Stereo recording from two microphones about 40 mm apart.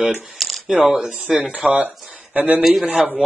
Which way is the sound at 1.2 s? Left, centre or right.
Right.